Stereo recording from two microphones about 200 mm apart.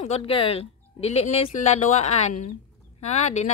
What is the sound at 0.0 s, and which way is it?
Speech, 30° left (ahead or behind).